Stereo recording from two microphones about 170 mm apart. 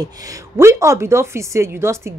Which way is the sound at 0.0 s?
20° right (ahead or behind).